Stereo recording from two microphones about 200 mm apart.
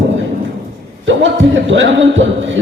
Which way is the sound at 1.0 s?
65° right (ahead or behind).